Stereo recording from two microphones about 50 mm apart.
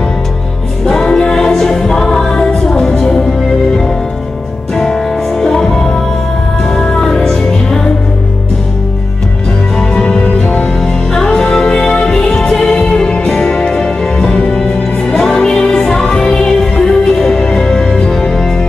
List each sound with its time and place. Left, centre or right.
0.8 s music: centre
5.4 s music: centre
6.7 s music: centre
9.9 s music: left